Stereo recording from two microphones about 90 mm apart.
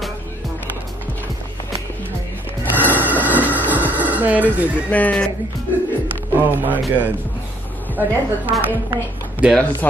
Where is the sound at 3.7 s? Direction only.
20° right (ahead or behind).